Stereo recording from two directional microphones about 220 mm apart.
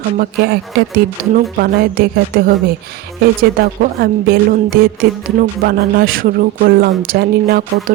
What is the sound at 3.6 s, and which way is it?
Speech, 45° right (ahead or behind).